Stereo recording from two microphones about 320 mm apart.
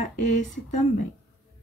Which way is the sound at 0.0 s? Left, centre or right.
Left.